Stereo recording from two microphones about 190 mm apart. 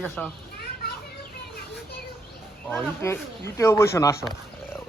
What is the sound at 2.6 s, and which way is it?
Speech, 10° left (ahead or behind).